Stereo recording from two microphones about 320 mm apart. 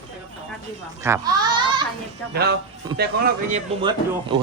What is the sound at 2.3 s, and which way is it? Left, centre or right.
Speech, right.